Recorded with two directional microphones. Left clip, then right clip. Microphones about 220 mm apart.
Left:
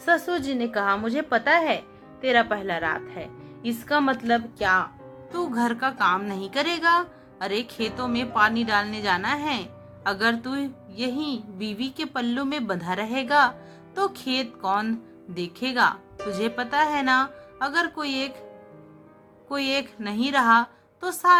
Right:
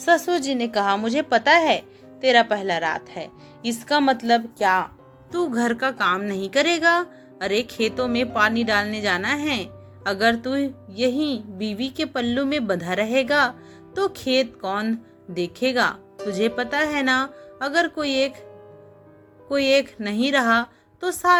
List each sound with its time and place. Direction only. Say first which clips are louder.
0.0 s a woman's voice: right 4 dB; 20° right (ahead or behind)
19.5 s speech: right 7 dB; 10° right (ahead or behind)